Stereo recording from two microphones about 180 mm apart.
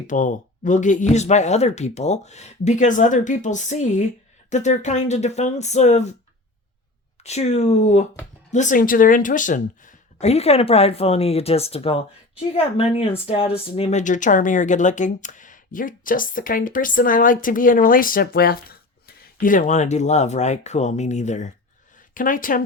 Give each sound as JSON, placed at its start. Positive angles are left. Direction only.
{"t": 0.1, "sound": "speech", "side_deg": 45}
{"t": 7.3, "sound": "speech", "side_deg": 40}